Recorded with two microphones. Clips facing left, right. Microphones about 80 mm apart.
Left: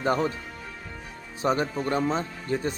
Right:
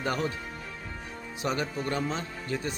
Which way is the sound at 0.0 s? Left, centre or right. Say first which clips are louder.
Left 5 dB; left.